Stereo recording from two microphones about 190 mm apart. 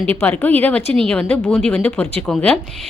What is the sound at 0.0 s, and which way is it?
A woman's voice, 10° left (ahead or behind).